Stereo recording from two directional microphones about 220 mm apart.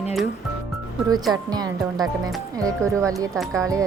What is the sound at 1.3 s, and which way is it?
Speech, 15° right (ahead or behind).